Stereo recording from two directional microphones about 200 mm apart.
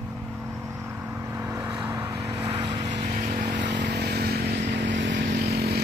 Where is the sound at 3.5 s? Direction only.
60° right (ahead or behind).